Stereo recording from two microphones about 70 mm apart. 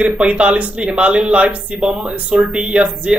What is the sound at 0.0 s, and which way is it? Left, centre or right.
Speech, centre.